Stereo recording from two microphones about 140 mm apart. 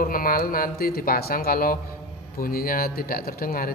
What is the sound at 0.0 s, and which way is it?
Speech, 90° left.